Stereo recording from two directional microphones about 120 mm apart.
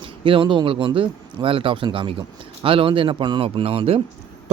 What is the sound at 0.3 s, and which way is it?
Speech, 45° right (ahead or behind).